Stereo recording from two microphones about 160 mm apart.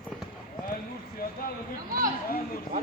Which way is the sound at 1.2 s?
70° left (ahead or behind).